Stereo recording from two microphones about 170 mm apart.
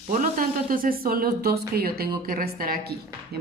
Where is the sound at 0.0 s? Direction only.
50° right (ahead or behind).